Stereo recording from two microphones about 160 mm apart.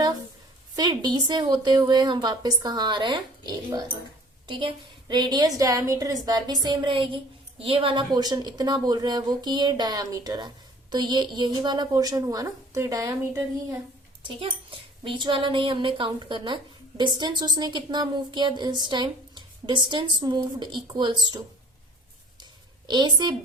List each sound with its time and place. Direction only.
0.8 s a woman's voice: 25° right (ahead or behind)
14.3 s a woman's voice: 35° right (ahead or behind)
22.9 s a woman's voice: 30° right (ahead or behind)